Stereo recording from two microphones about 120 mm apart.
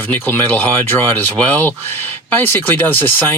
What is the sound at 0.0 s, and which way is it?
Speech, 15° left (ahead or behind).